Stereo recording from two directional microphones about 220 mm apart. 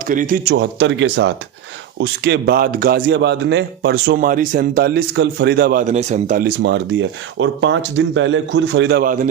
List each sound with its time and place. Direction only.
0.0 s a man's voice: 35° right (ahead or behind)
0.5 s a man's voice: 55° right (ahead or behind); by 6.5 s 35° right (ahead or behind)
6.6 s a man's voice: 55° right (ahead or behind); by 9.3 s 40° right (ahead or behind)